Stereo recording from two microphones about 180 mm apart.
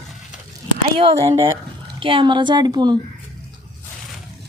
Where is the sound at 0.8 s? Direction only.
30° right (ahead or behind).